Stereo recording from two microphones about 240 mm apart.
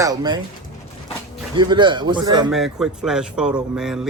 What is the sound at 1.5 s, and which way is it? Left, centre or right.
Speech, centre.